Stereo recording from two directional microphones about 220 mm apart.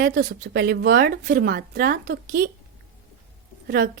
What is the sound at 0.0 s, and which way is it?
A woman's voice, 50° right (ahead or behind).